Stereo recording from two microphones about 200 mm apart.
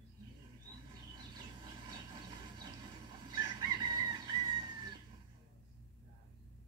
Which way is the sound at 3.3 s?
20° right (ahead or behind).